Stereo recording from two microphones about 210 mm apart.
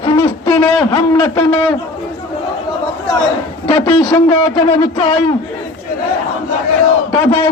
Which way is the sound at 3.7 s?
20° left (ahead or behind).